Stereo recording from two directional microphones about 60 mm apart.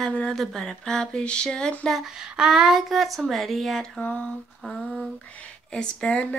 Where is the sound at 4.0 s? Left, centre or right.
Left.